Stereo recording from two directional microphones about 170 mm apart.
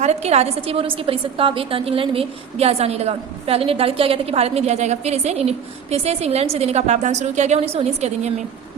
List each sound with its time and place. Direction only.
0.0 s a woman's voice: 40° right (ahead or behind)